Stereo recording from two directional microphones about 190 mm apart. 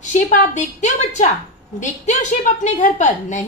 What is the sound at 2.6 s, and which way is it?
Speech, 40° left (ahead or behind).